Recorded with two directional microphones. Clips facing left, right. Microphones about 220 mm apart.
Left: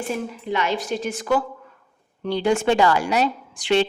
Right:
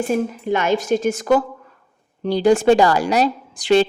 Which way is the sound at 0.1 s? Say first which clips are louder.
Right 6 dB; 45° right (ahead or behind).